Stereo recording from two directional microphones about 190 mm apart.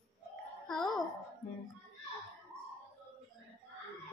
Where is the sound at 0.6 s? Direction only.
Centre (ahead or behind).